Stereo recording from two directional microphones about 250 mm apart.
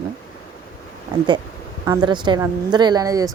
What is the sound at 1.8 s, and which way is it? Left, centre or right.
Speech, centre.